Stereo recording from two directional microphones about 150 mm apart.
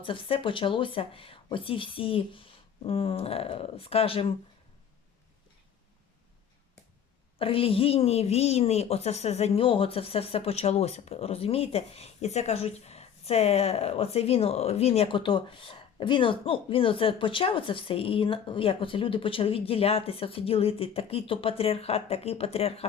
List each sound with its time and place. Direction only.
0.0 s a woman's voice: 35° left (ahead or behind)
7.3 s a woman's voice: 40° left (ahead or behind)